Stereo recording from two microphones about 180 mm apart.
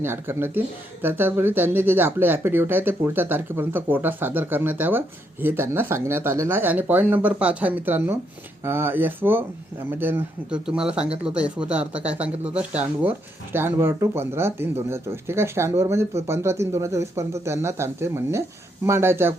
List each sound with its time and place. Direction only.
0.0 s speech: 10° right (ahead or behind)